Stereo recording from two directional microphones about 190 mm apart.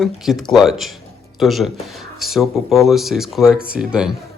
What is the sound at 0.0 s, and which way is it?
Speech, centre (ahead or behind).